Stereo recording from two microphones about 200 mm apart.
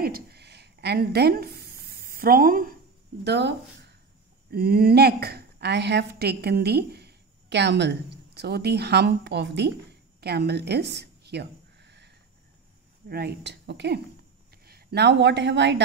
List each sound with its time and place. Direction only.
0.0 s a sound: 50° right (ahead or behind)
3.3 s a woman's voice: 60° right (ahead or behind)
13.1 s speech: 55° right (ahead or behind)